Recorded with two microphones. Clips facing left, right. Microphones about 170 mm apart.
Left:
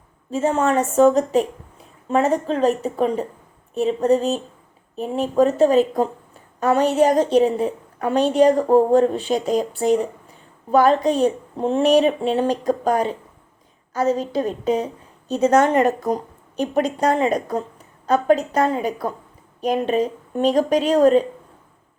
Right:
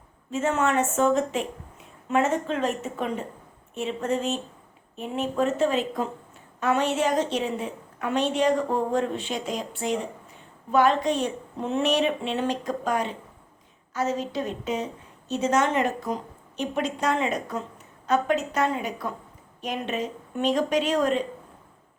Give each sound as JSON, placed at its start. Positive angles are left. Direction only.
{"t": 0.3, "sound": "a woman's voice", "side_deg": 35}